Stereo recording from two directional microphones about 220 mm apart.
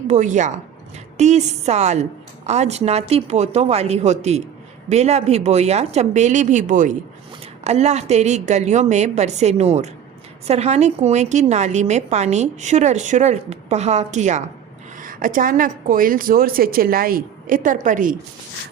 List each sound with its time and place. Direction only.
0.1 s a woman's voice: 35° right (ahead or behind)